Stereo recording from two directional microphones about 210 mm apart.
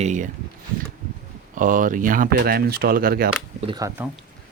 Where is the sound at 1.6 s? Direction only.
40° right (ahead or behind).